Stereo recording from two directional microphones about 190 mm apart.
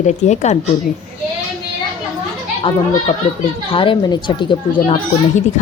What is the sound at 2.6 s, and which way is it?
Speech, 30° left (ahead or behind).